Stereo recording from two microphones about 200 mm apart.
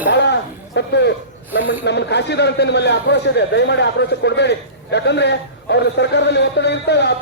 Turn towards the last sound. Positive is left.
turn(degrees=60)  # may be behind; listen again after turning